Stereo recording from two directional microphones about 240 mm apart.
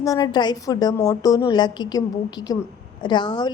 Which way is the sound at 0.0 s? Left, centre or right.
Centre.